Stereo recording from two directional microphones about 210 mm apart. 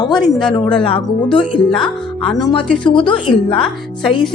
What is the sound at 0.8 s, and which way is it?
Speech, 25° left (ahead or behind).